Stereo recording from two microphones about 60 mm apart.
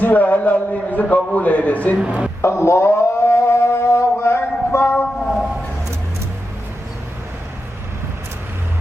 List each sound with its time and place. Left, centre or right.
0.0 s a man's voice: left
2.0 s speech: centre
2.4 s a sound: left